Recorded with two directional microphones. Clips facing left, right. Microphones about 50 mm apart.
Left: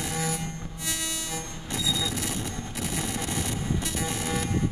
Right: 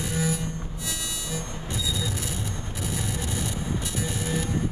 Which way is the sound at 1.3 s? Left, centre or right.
Left.